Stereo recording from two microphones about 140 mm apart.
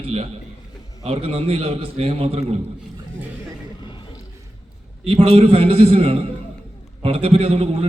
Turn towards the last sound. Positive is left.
turn(degrees=-45)  # may be behind; listen again after turning